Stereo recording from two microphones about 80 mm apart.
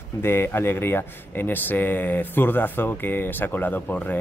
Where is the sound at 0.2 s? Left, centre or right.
Left.